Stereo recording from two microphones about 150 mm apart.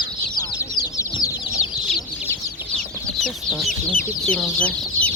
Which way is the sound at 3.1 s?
Centre (ahead or behind).